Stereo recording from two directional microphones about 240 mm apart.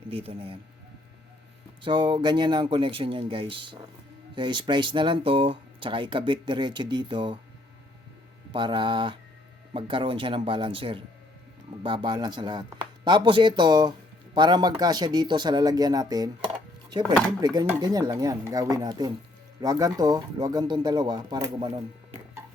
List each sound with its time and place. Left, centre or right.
0.1 s speech: right
1.8 s speech: centre
8.5 s speech: centre